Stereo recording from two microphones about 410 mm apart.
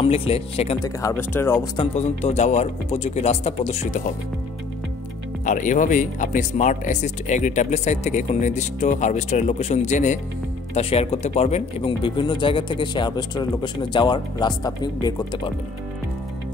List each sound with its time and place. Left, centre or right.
0.0 s speech: centre
5.4 s speech: centre